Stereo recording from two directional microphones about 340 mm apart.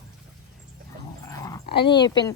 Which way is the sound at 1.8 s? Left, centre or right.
Centre.